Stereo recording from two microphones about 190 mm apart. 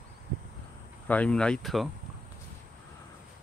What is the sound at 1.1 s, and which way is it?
Speech, 5° left (ahead or behind).